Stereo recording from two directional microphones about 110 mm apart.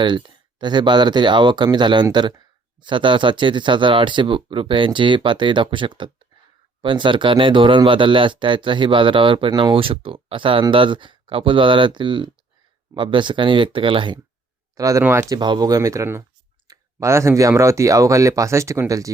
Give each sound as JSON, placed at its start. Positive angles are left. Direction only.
{"t": 0.0, "sound": "speech", "side_deg": -45}
{"t": 9.5, "sound": "speech", "side_deg": -40}
{"t": 9.7, "sound": "speech", "side_deg": -55}
{"t": 14.8, "sound": "speech", "side_deg": -30}
{"t": 15.4, "sound": "speech", "side_deg": -40}